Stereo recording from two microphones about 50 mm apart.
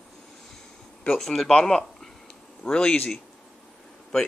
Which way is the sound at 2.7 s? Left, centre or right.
Left.